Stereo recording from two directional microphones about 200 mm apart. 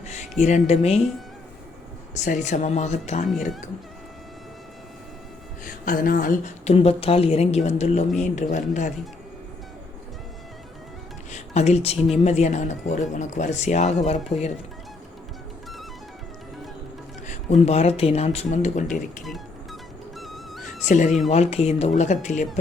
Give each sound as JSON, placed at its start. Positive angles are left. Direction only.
{"t": 0.0, "sound": "a sound", "side_deg": 35}
{"t": 0.7, "sound": "a woman's voice", "side_deg": 30}
{"t": 2.1, "sound": "a woman's voice", "side_deg": 35}
{"t": 5.6, "sound": "a woman's voice", "side_deg": 45}
{"t": 11.3, "sound": "music", "side_deg": 35}
{"t": 12.1, "sound": "a woman's voice", "side_deg": 35}
{"t": 17.2, "sound": "a woman's voice", "side_deg": 35}
{"t": 20.1, "sound": "music", "side_deg": 0}
{"t": 20.8, "sound": "a woman's voice", "side_deg": 40}